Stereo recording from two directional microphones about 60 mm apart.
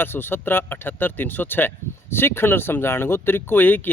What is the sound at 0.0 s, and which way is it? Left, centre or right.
Speech, left.